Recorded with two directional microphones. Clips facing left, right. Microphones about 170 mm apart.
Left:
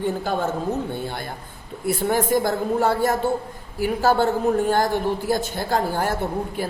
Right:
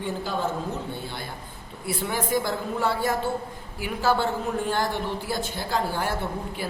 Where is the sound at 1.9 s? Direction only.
45° left (ahead or behind).